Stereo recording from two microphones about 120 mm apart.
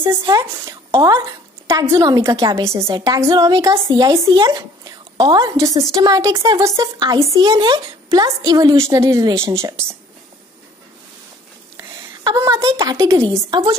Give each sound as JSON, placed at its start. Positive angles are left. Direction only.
{"t": 0.2, "sound": "a woman's voice", "side_deg": -30}
{"t": 11.7, "sound": "a sound", "side_deg": -35}
{"t": 12.4, "sound": "a woman's voice", "side_deg": -25}